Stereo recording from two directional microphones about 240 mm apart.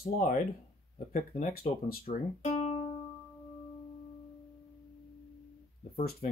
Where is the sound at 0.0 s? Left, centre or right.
Left.